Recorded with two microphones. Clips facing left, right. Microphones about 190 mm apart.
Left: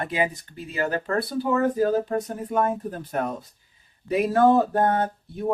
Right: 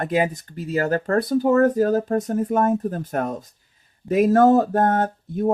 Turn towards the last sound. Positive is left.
turn(degrees=-45)  # may be behind; listen again after turning